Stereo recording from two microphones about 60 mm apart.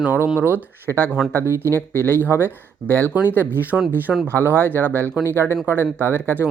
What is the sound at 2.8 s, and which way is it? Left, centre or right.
Speech, left.